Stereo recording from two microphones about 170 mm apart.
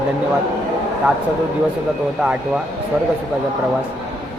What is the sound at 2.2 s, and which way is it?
Speech, 5° right (ahead or behind).